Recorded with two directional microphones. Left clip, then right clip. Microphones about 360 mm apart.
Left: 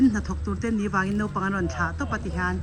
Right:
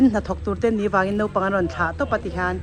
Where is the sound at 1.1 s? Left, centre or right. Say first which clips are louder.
Right 7 dB; right.